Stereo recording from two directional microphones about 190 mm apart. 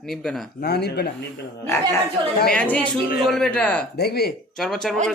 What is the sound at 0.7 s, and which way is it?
Speech, 60° left (ahead or behind).